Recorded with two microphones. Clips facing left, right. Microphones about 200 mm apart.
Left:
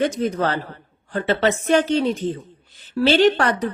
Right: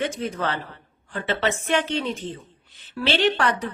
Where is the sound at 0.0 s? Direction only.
40° left (ahead or behind).